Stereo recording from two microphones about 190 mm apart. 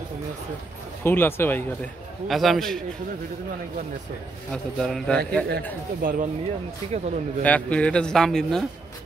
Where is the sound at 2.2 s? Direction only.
Centre (ahead or behind).